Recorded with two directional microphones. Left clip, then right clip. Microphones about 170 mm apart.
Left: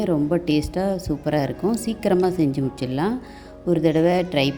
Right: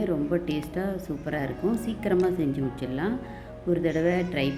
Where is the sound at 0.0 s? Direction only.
35° left (ahead or behind).